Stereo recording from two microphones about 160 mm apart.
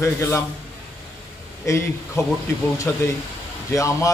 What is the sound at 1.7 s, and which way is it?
A man's voice, 20° left (ahead or behind).